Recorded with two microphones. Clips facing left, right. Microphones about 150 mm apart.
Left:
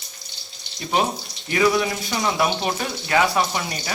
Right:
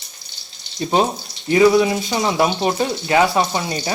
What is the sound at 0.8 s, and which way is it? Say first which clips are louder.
Speech: right 4 dB; 30° right (ahead or behind).